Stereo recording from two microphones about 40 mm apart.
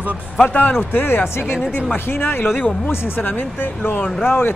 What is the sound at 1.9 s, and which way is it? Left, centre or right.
Speech, left.